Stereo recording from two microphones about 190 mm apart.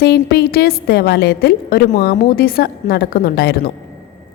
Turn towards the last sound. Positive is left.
turn(degrees=55)  # may be behind; listen again after turning